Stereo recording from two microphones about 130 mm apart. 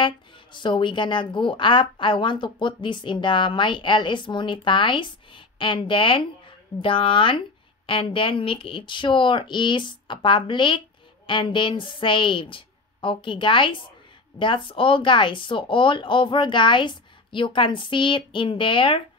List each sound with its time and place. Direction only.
0.0 s a woman's voice: 40° left (ahead or behind)